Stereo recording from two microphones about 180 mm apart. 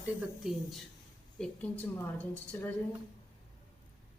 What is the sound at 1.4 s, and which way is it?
Speech, 10° left (ahead or behind).